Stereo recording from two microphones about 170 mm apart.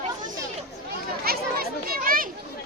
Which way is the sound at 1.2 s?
60° right (ahead or behind).